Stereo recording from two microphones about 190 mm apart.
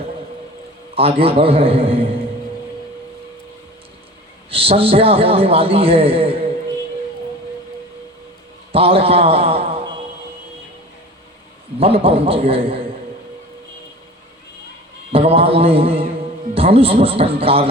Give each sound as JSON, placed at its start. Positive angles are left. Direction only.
{"t": 0.9, "sound": "a man's voice", "side_deg": -30}
{"t": 4.5, "sound": "a man's voice", "side_deg": -30}
{"t": 8.7, "sound": "a man's voice", "side_deg": -30}
{"t": 11.8, "sound": "a man's voice", "side_deg": -30}
{"t": 15.1, "sound": "a man's voice", "side_deg": -30}